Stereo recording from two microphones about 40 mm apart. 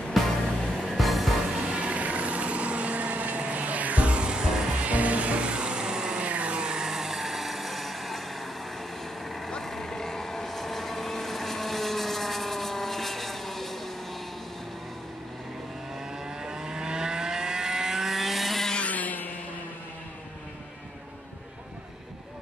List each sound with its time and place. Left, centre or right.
0.2 s music: centre
1.7 s vehicle: right
3.4 s music: right
4.8 s music: right
6.2 s vehicle: right
6.6 s vehicle: centre
16.3 s vehicle: centre
18.8 s a sound: left